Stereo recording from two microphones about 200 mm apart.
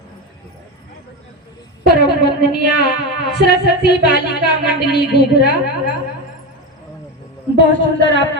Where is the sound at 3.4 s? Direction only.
55° left (ahead or behind).